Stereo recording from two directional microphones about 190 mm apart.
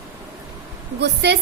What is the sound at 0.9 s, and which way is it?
Speech, 60° right (ahead or behind).